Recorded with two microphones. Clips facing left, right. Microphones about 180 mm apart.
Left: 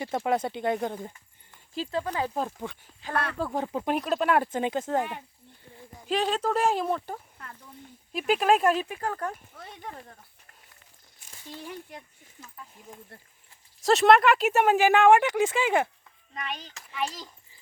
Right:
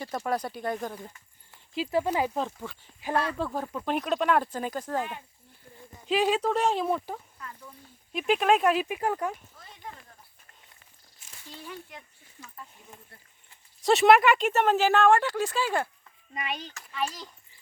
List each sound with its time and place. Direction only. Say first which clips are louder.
0.0 s speech: left 3 dB; 25° left (ahead or behind)
1.5 s speech: right 2 dB; 5° right (ahead or behind)
3.5 s speech: left 3 dB; 25° left (ahead or behind)
3.8 s speech: even; centre (ahead or behind)
4.5 s speech: left 4 dB; 20° left (ahead or behind)
6.1 s speech: right 2 dB; 5° right (ahead or behind)
8.9 s speech: right 3 dB; 15° right (ahead or behind)
13.8 s speech: even; centre (ahead or behind); by 15.9 s 20° left (ahead or behind)
16.3 s speech: right 2 dB; 10° right (ahead or behind)
16.7 s speech: left 2 dB; 15° left (ahead or behind)